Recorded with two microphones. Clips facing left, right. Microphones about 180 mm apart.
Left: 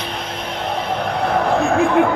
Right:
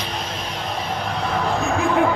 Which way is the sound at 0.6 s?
60° left (ahead or behind).